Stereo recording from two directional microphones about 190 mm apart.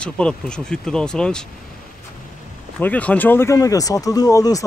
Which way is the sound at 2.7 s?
5° left (ahead or behind).